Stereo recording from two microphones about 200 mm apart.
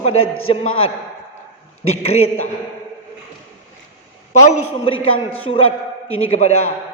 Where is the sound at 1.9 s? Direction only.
30° left (ahead or behind).